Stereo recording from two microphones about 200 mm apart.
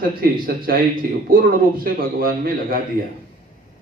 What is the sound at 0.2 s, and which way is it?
Speech, 50° right (ahead or behind).